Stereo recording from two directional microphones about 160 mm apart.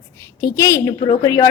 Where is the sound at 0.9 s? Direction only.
30° left (ahead or behind).